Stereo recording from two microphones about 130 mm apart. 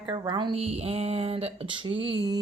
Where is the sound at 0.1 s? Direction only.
35° right (ahead or behind).